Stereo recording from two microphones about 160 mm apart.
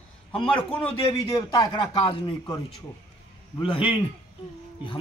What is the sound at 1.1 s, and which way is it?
Speech, 20° left (ahead or behind).